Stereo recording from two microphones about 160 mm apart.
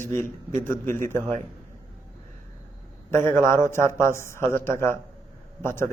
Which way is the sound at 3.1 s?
15° left (ahead or behind).